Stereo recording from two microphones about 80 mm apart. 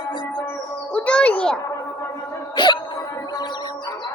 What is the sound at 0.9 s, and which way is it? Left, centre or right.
Music, centre.